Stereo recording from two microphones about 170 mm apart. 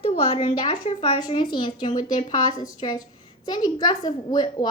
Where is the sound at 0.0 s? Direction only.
35° left (ahead or behind).